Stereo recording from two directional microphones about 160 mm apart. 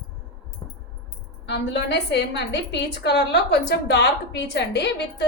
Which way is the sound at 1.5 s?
90° left.